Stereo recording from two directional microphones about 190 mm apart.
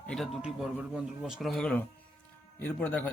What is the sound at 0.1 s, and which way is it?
A man's voice, centre (ahead or behind).